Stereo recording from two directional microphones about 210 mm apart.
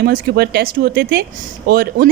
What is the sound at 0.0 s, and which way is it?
A woman's voice, 50° right (ahead or behind).